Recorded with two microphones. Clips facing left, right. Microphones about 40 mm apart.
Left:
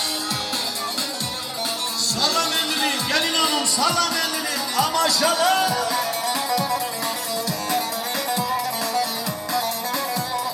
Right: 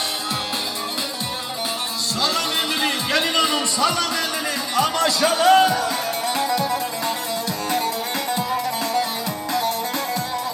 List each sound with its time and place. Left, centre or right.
2.2 s music: right
9.5 s music: right